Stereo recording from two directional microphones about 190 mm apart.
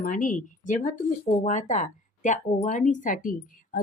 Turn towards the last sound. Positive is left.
turn(degrees=45)  # may be behind; listen again after turning